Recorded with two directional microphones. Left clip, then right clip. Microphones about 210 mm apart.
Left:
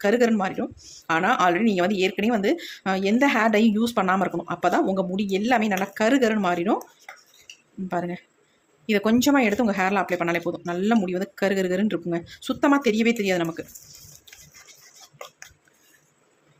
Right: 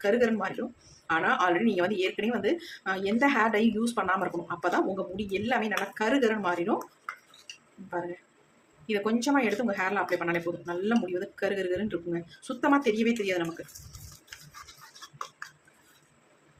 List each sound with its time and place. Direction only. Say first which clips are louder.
0.0 s speech: left 5 dB; 40° left (ahead or behind)
8.9 s speech: left 6 dB; 40° left (ahead or behind)